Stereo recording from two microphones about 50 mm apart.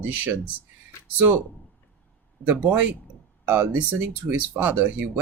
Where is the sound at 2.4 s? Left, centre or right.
Right.